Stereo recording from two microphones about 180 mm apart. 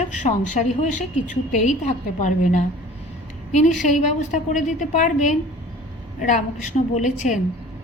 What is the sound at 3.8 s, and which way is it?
A woman's voice, 45° left (ahead or behind).